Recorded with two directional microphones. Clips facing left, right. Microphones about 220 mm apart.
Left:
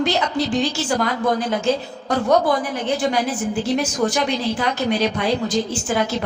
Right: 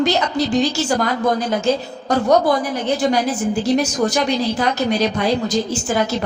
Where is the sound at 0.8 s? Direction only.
40° right (ahead or behind).